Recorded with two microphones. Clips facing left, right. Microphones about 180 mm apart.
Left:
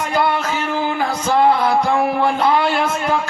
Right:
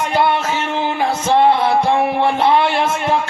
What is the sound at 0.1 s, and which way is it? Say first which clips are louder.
Music: right 1 dB; 25° right (ahead or behind).